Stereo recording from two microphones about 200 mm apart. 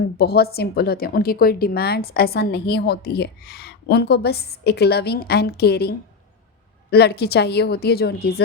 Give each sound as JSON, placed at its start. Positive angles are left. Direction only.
{"t": 0.2, "sound": "a woman's voice", "side_deg": 50}
{"t": 6.9, "sound": "a woman's voice", "side_deg": 55}